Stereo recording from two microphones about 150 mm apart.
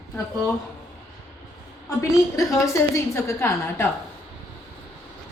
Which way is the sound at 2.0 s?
20° left (ahead or behind).